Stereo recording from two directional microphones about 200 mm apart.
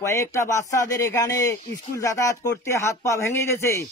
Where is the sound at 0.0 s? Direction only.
15° left (ahead or behind).